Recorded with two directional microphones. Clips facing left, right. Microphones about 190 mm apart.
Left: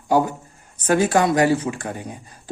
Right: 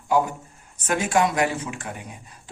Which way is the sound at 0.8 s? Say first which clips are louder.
Left 4 dB; 35° left (ahead or behind).